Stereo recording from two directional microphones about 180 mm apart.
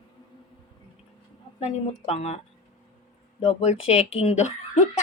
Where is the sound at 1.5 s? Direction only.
35° left (ahead or behind).